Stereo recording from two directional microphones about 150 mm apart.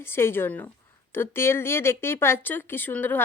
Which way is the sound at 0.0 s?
15° left (ahead or behind).